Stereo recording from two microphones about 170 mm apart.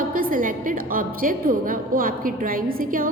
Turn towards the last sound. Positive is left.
turn(degrees=-55)  # may be behind; listen again after turning